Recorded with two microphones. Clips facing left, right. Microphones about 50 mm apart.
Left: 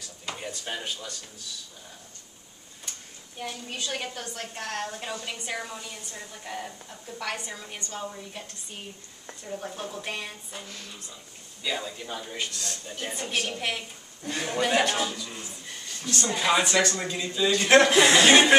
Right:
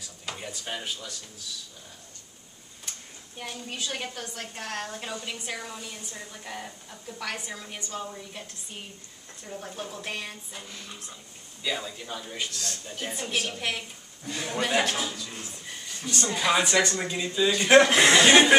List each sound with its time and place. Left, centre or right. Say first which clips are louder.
0.0 s a sound: left 1 dB; centre
3.3 s a woman's voice: left 1 dB; centre
14.2 s a man's voice: left 3 dB; left
14.5 s a woman's voice: left 2 dB; centre
15.4 s speech: even; centre
16.2 s a woman's voice: even; centre
18.0 s a woman's voice: even; centre